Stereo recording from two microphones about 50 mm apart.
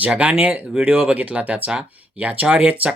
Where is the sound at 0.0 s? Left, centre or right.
Right.